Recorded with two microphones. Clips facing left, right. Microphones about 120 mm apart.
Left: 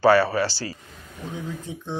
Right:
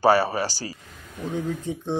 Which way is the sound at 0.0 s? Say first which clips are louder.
Left 2 dB; 15° right (ahead or behind).